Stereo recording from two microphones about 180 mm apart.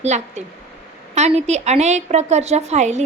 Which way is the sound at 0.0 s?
40° right (ahead or behind).